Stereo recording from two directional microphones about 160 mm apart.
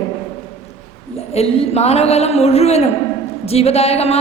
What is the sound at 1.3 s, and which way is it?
A woman's voice, 40° left (ahead or behind).